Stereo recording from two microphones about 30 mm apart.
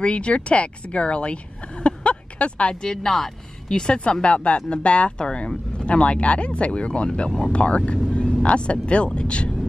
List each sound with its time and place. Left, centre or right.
0.0 s a woman's voice: left
2.8 s a woman's voice: centre; by 7.1 s left
7.2 s speech: centre
7.5 s speech: left